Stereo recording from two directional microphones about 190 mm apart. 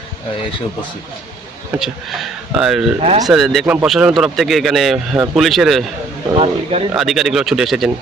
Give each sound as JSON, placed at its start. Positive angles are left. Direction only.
{"t": 1.8, "sound": "a man's voice", "side_deg": 0}
{"t": 3.0, "sound": "speech", "side_deg": -30}
{"t": 3.2, "sound": "a man's voice", "side_deg": 0}
{"t": 6.3, "sound": "speech", "side_deg": -30}
{"t": 6.9, "sound": "a man's voice", "side_deg": 0}